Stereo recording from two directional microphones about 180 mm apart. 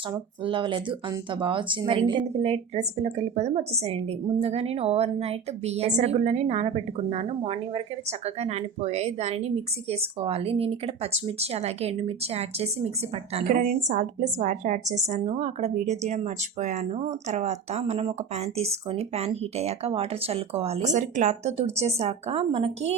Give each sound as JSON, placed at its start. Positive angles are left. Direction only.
{"t": 0.1, "sound": "a woman's voice", "side_deg": -25}